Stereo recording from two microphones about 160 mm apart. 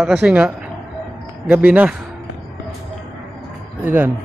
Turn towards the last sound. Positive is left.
turn(degrees=-15)  # may be behind; listen again after turning